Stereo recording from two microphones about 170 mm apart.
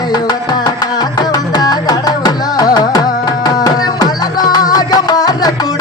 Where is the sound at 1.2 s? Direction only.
25° left (ahead or behind).